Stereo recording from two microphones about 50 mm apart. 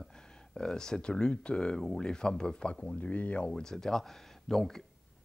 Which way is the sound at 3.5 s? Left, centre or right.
Centre.